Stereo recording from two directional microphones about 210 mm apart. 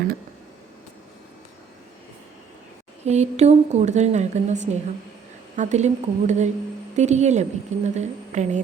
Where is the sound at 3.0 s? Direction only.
30° right (ahead or behind).